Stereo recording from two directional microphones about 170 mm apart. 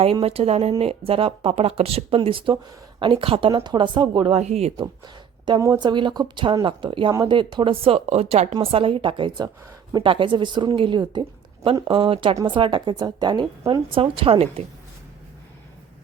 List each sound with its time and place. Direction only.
0.0 s speech: 35° right (ahead or behind)
5.5 s speech: 20° right (ahead or behind); by 14.6 s 35° right (ahead or behind)